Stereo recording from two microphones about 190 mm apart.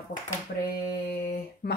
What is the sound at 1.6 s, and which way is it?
Speech, 55° left (ahead or behind).